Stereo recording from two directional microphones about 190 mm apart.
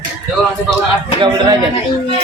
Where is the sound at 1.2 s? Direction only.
20° right (ahead or behind).